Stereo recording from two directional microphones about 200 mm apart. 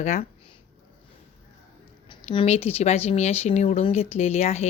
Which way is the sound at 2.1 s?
30° left (ahead or behind).